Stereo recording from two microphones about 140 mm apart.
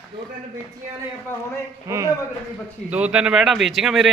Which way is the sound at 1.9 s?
25° right (ahead or behind).